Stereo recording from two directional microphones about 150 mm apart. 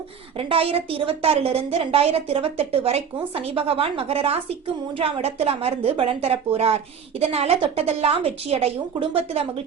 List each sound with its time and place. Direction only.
0.3 s a woman's voice: 40° right (ahead or behind)